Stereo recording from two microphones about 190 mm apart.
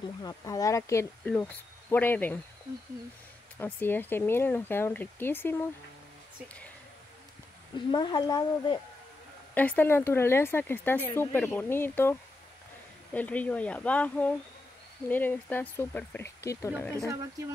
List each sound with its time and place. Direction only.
0.2 s speech: 20° left (ahead or behind)
3.5 s speech: 10° left (ahead or behind)
7.7 s speech: 25° left (ahead or behind)
9.5 s speech: 10° left (ahead or behind)